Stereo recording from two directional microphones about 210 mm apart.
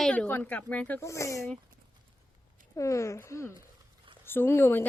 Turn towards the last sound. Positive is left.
turn(degrees=10)  # may be behind; listen again after turning